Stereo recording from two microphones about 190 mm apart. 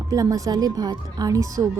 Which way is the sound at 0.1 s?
20° right (ahead or behind).